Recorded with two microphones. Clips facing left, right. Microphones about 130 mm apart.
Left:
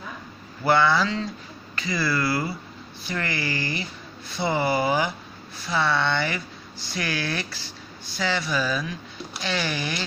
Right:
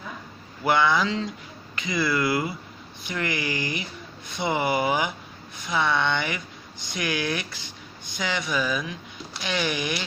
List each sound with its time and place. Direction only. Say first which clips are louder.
0.7 s speech: left 1 dB; 15° right (ahead or behind)